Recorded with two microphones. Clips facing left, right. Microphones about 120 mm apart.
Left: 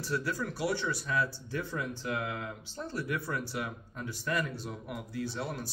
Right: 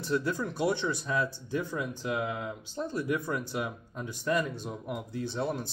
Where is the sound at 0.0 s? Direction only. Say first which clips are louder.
Right 4 dB; 20° right (ahead or behind).